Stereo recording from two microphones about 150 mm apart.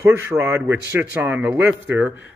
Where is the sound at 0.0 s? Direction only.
15° right (ahead or behind).